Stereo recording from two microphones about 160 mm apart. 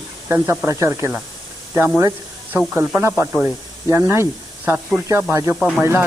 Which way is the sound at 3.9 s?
15° right (ahead or behind).